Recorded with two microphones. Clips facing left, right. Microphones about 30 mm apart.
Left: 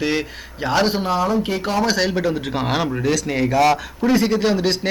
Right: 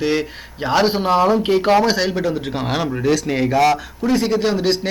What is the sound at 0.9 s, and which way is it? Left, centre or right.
Speech, right.